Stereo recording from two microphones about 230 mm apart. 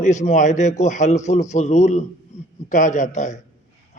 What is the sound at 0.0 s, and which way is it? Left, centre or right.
A man's voice, left.